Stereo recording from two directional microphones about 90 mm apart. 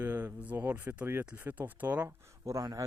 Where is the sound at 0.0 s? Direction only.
20° right (ahead or behind).